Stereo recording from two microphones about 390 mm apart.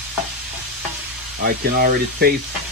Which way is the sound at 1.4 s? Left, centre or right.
Right.